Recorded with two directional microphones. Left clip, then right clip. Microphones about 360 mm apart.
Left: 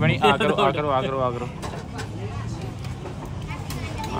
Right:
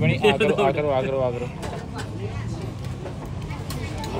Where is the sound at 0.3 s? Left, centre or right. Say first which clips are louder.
Right 2 dB; centre.